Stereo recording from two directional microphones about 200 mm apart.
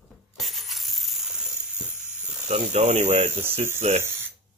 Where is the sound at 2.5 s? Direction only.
35° right (ahead or behind).